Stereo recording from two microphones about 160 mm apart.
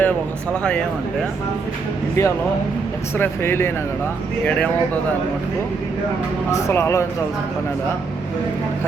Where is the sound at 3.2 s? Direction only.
15° left (ahead or behind).